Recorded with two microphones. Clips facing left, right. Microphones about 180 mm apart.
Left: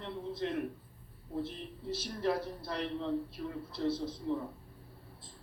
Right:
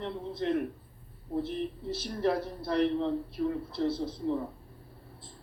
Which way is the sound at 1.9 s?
60° right (ahead or behind).